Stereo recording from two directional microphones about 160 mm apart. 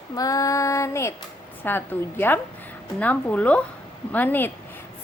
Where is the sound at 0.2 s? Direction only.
20° left (ahead or behind).